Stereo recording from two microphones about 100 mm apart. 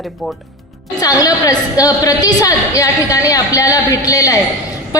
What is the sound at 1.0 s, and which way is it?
A woman's voice, 40° left (ahead or behind).